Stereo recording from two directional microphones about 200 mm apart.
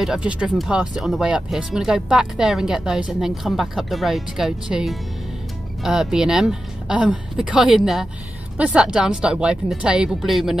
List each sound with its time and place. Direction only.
0.0 s speech: 5° right (ahead or behind)